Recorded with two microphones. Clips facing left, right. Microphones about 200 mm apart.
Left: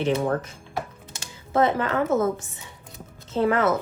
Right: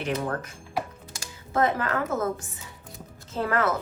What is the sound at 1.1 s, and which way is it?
Music, 25° left (ahead or behind).